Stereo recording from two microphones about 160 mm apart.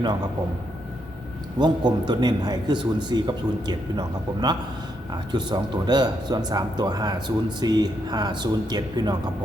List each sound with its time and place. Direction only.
1.5 s speech: 30° right (ahead or behind)